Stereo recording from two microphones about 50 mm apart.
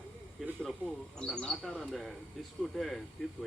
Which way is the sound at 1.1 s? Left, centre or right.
Centre.